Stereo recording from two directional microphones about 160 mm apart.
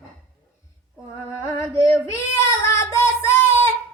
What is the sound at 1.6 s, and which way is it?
Child singing, 15° left (ahead or behind).